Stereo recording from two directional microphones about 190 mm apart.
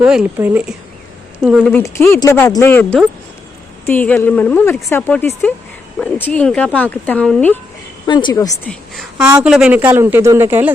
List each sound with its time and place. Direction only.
0.0 s speech: 5° right (ahead or behind)
1.7 s speech: 15° left (ahead or behind)
8.0 s a woman's voice: 25° left (ahead or behind)
8.7 s a woman's voice: centre (ahead or behind)
9.2 s speech: 15° right (ahead or behind)